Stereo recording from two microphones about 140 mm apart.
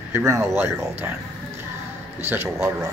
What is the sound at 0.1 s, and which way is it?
Speech, 20° right (ahead or behind).